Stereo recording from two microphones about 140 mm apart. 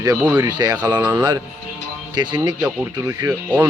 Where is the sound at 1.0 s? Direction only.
15° right (ahead or behind).